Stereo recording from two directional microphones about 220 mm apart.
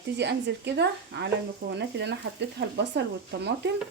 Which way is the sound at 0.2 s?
50° right (ahead or behind).